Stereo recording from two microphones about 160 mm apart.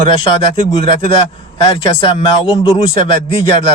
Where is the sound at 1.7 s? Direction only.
30° left (ahead or behind).